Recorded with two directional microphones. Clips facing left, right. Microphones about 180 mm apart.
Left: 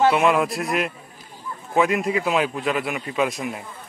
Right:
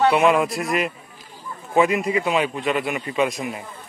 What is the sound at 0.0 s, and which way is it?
A man's voice, centre (ahead or behind).